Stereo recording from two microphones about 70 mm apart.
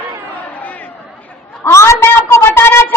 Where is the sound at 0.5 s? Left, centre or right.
Left.